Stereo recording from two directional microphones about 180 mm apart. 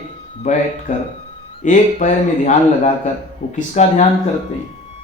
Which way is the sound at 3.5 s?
40° left (ahead or behind).